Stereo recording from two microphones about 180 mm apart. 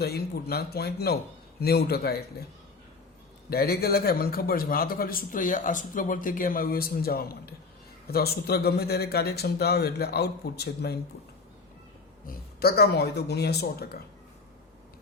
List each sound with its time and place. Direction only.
0.0 s a man's voice: 60° left (ahead or behind)
12.2 s a man's voice: 55° left (ahead or behind)